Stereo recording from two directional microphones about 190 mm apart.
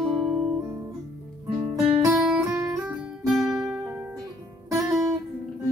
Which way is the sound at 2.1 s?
Centre (ahead or behind).